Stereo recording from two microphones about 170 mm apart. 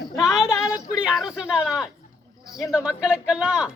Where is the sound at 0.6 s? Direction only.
5° right (ahead or behind).